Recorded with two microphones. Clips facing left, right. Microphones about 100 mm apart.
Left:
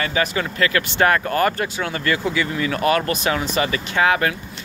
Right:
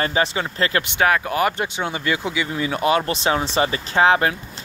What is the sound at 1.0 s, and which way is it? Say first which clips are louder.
Speech: left 1 dB; 5° right (ahead or behind).